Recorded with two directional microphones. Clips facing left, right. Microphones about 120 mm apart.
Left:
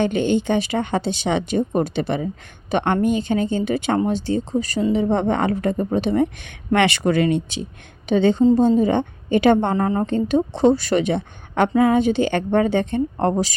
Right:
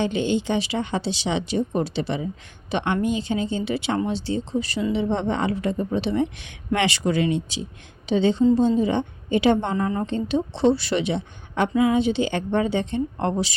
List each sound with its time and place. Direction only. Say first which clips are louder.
0.0 s speech: left 4 dB; 55° left (ahead or behind)